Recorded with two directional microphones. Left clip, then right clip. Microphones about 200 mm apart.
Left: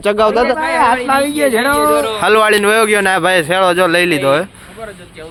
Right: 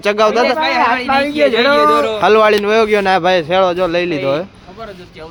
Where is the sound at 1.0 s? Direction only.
65° left (ahead or behind).